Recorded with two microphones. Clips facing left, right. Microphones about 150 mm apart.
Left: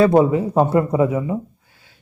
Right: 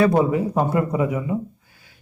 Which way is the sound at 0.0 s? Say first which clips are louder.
Left 3 dB; 25° left (ahead or behind).